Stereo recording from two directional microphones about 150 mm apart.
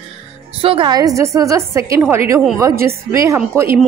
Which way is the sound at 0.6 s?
35° right (ahead or behind).